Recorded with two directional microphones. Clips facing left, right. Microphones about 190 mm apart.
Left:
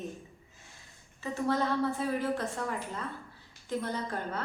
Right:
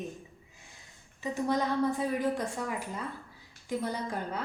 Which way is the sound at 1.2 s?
15° right (ahead or behind).